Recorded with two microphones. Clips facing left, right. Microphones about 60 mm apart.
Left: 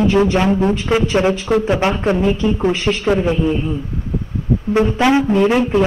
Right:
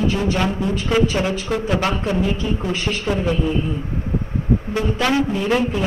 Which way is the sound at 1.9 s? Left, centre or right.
Left.